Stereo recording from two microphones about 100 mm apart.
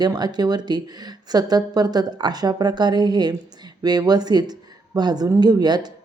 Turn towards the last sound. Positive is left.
turn(degrees=-45)  # may be behind; listen again after turning